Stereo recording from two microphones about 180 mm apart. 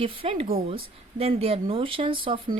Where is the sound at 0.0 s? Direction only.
30° right (ahead or behind).